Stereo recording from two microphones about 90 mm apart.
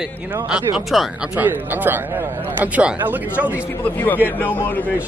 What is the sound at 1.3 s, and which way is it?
Speech, 20° right (ahead or behind).